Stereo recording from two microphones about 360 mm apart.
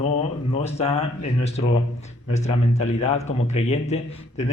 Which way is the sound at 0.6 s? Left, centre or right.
Centre.